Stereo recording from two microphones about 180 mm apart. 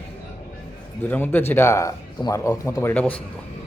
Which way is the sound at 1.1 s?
10° left (ahead or behind).